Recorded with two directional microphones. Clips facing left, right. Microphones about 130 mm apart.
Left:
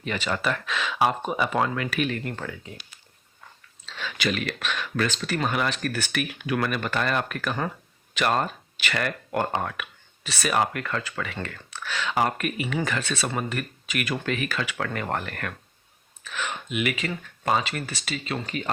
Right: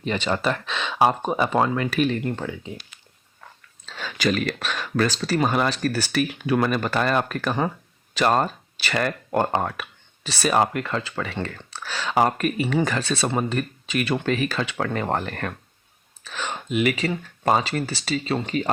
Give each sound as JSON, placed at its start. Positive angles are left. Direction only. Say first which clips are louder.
{"t": 0.0, "sound": "speech", "louder": "right 4 dB", "side_deg": -30}
{"t": 2.2, "sound": "speech", "louder": "right 5 dB", "side_deg": -20}
{"t": 3.8, "sound": "speech", "louder": "right 4 dB", "side_deg": -40}